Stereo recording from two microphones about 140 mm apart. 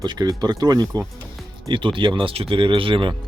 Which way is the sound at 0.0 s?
30° right (ahead or behind).